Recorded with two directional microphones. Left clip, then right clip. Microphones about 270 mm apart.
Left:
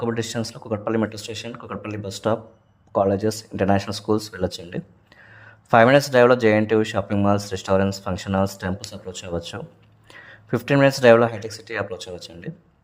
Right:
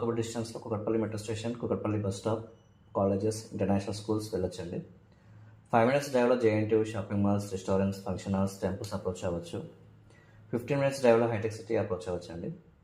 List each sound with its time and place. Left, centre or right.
0.0 s speech: left
5.7 s speech: left
10.5 s speech: left